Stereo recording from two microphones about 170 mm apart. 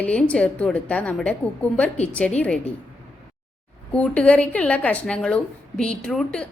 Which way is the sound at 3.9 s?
5° left (ahead or behind).